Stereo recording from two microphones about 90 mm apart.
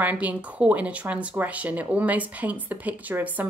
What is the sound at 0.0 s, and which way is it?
Speech, 20° right (ahead or behind).